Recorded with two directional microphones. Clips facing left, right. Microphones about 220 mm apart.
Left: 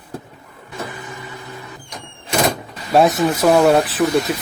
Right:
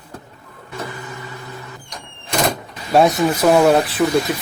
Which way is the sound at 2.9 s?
Centre (ahead or behind).